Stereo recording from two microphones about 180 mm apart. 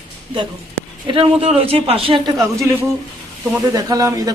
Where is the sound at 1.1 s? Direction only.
30° right (ahead or behind).